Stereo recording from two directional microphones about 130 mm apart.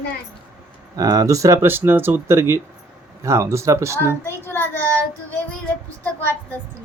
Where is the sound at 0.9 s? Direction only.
30° right (ahead or behind).